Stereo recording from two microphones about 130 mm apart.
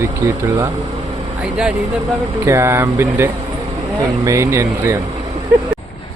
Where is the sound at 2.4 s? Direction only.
20° right (ahead or behind).